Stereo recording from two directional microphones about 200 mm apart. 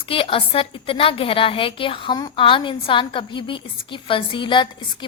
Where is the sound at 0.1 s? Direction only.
25° left (ahead or behind).